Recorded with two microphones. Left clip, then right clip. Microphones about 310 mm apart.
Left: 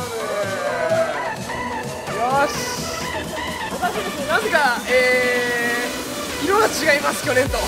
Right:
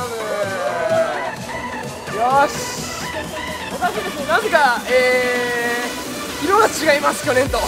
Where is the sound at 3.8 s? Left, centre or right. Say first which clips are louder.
Right 3 dB; centre.